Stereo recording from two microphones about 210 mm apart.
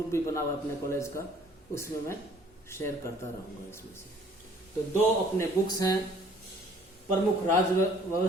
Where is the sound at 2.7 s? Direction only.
10° left (ahead or behind).